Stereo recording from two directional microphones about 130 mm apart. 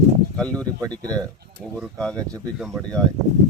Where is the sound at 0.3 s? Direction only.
10° left (ahead or behind).